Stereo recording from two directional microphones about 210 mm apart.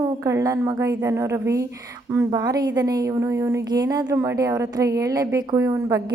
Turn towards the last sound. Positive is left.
turn(degrees=-15)  # may be behind; listen again after turning